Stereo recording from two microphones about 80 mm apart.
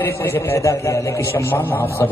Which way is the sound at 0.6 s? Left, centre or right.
Left.